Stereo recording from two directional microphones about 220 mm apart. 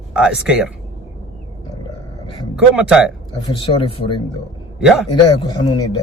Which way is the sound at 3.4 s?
25° left (ahead or behind).